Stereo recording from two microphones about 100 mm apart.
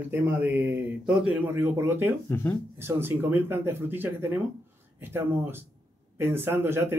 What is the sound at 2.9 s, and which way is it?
Speech, 20° right (ahead or behind).